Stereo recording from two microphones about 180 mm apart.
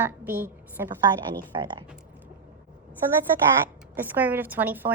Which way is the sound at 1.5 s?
25° right (ahead or behind).